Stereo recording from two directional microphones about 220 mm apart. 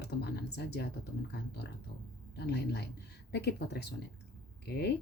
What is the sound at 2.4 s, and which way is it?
Speech, 50° left (ahead or behind).